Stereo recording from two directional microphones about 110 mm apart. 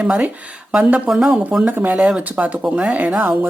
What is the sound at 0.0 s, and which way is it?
Speech, 10° right (ahead or behind).